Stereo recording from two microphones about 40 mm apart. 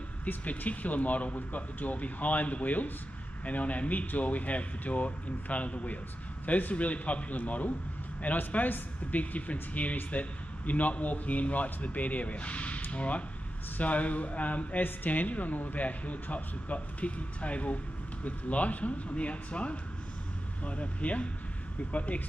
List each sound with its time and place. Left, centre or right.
0.2 s a man's voice: left